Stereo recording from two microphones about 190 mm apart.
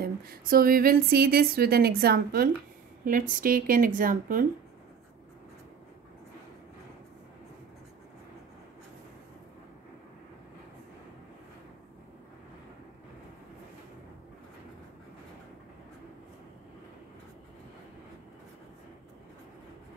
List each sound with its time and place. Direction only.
0.0 s speech: 50° right (ahead or behind)